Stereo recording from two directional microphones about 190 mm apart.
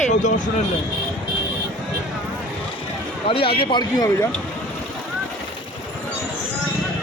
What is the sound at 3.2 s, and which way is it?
A man's voice, 30° left (ahead or behind).